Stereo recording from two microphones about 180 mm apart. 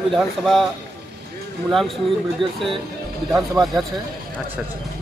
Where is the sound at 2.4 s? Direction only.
25° right (ahead or behind).